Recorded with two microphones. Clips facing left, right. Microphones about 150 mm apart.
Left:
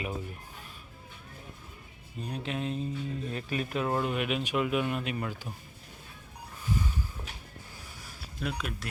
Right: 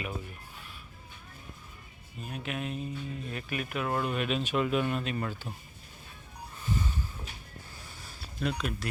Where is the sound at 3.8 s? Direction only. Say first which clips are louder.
Right 1 dB; 20° left (ahead or behind).